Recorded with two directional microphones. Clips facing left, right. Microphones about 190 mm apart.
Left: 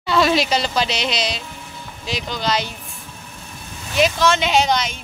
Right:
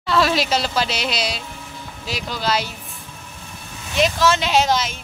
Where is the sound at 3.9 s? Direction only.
Centre (ahead or behind).